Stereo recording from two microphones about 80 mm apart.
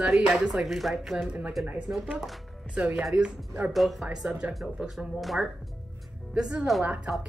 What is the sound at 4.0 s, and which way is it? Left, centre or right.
Speech, centre.